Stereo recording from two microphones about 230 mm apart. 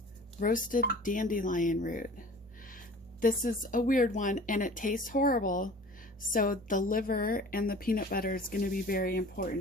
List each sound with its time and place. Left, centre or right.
0.3 s a woman's voice: left